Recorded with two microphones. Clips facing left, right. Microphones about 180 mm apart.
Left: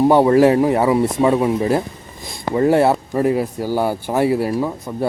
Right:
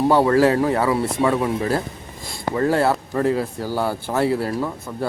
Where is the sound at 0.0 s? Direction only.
20° left (ahead or behind).